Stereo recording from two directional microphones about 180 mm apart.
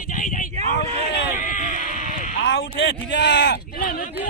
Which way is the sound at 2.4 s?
80° left.